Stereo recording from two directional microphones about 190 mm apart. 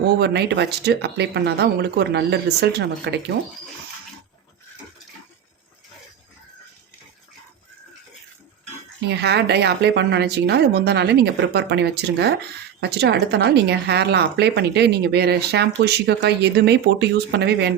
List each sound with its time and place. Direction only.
0.2 s speech: 60° right (ahead or behind)
9.0 s speech: 60° right (ahead or behind)